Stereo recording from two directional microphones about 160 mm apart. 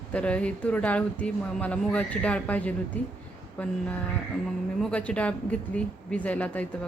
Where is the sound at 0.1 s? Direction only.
10° left (ahead or behind).